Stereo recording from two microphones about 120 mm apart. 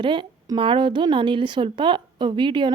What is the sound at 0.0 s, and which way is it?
A woman's voice, 45° right (ahead or behind).